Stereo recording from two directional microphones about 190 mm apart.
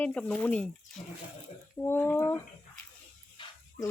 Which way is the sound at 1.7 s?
10° left (ahead or behind).